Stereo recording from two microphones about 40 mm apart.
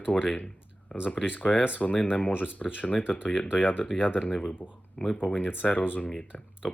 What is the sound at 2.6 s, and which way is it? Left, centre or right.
Speech, centre.